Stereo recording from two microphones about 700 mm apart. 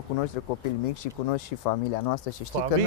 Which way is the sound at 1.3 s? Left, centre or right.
Left.